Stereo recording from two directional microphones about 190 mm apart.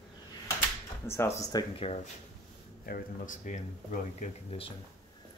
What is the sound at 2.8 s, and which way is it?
Speech, 45° left (ahead or behind).